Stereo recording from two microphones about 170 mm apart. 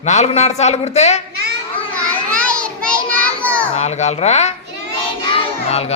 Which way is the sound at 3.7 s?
40° left (ahead or behind).